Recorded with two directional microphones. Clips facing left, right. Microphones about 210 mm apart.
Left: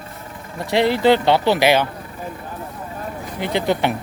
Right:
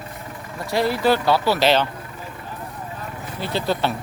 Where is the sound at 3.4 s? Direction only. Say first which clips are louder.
Left 3 dB; 20° left (ahead or behind).